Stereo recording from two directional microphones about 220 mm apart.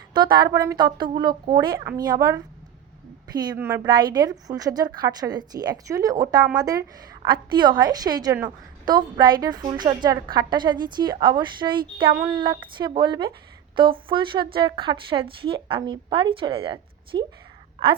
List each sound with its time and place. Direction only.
0.1 s a woman's voice: 20° right (ahead or behind)